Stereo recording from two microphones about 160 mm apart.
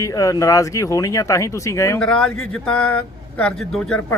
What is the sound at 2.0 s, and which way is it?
Speech, 5° left (ahead or behind).